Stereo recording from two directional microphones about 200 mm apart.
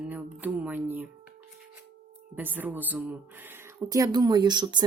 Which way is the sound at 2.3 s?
10° right (ahead or behind).